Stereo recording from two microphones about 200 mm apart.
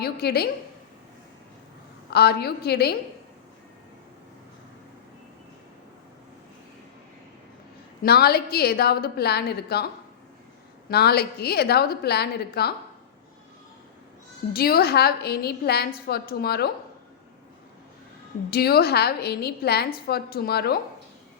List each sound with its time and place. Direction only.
0.0 s a woman's voice: 50° left (ahead or behind)
2.0 s a woman's voice: 55° left (ahead or behind)
8.0 s a woman's voice: 50° left (ahead or behind)
10.8 s a woman's voice: 50° left (ahead or behind)
14.5 s a woman's voice: 50° left (ahead or behind)
18.5 s a woman's voice: 50° left (ahead or behind)